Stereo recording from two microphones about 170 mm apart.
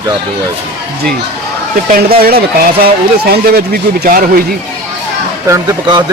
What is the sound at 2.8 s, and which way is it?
Speech, 65° right (ahead or behind).